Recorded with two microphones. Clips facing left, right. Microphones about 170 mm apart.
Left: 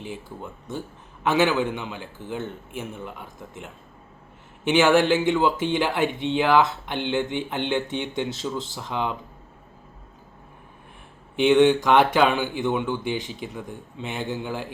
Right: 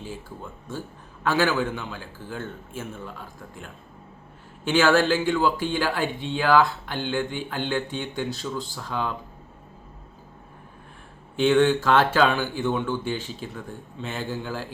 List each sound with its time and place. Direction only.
1.2 s speech: 20° left (ahead or behind)
11.3 s speech: 15° left (ahead or behind)